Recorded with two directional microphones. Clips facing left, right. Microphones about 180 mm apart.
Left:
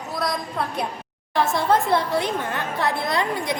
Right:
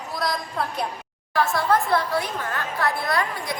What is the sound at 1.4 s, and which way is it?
A woman's voice, 20° left (ahead or behind).